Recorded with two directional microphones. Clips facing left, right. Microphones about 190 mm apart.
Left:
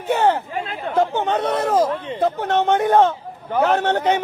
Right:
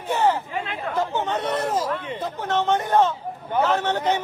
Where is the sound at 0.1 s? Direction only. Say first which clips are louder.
Left 3 dB; 65° left (ahead or behind).